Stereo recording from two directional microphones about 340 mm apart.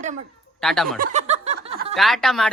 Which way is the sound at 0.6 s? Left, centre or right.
Centre.